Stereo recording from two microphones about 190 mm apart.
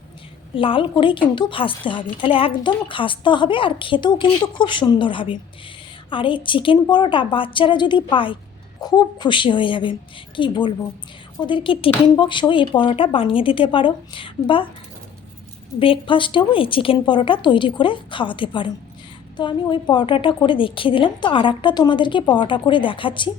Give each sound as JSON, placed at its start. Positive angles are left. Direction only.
{"t": 0.5, "sound": "a woman's voice", "side_deg": 25}
{"t": 15.8, "sound": "a woman's voice", "side_deg": 25}